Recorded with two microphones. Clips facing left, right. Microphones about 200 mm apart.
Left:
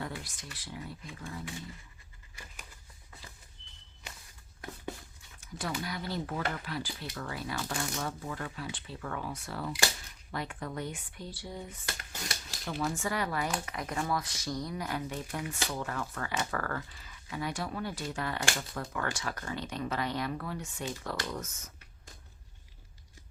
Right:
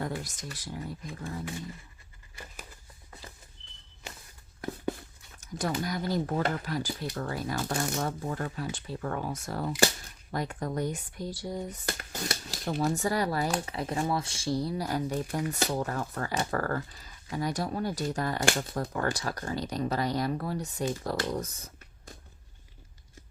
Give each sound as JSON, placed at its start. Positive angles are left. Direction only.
{"t": 0.0, "sound": "speech", "side_deg": -40}
{"t": 5.4, "sound": "speech", "side_deg": -40}